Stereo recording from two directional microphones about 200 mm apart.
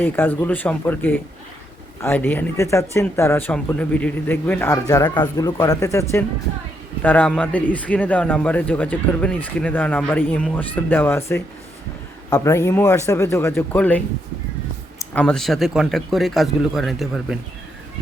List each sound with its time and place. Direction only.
0.0 s a man's voice: 10° left (ahead or behind)
12.3 s a man's voice: 15° left (ahead or behind); by 17.3 s centre (ahead or behind)